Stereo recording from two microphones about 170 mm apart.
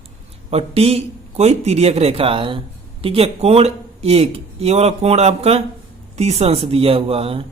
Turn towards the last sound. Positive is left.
turn(degrees=-35)  # may be behind; listen again after turning